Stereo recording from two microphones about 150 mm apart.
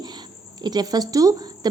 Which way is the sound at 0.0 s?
30° right (ahead or behind).